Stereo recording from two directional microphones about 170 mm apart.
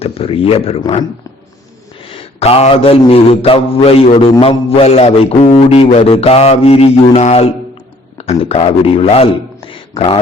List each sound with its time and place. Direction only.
0.0 s mantra: 35° left (ahead or behind)
2.0 s mantra: 35° left (ahead or behind)
8.2 s a man's voice: 35° left (ahead or behind)